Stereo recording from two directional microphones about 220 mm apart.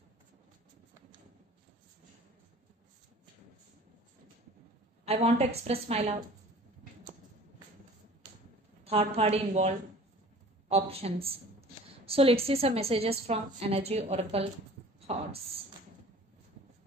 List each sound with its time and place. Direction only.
5.0 s a woman's voice: 30° right (ahead or behind)
8.8 s a woman's voice: 25° right (ahead or behind)
15.1 s a sound: 30° right (ahead or behind)